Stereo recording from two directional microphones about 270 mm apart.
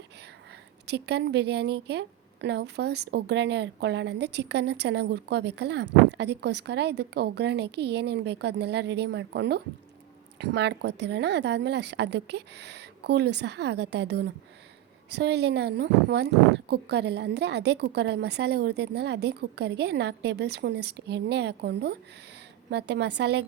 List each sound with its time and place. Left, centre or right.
0.9 s a woman's voice: right